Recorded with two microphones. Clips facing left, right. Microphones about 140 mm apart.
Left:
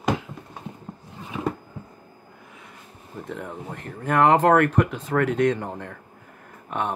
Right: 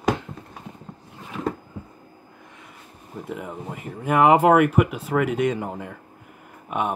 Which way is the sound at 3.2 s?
5° right (ahead or behind).